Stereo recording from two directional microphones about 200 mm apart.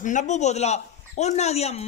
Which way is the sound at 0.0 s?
40° left (ahead or behind).